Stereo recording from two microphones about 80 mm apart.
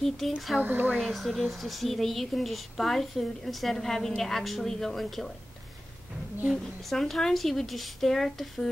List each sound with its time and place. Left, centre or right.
0.2 s speech: centre
0.6 s speech: right
0.9 s speech: centre
6.9 s speech: centre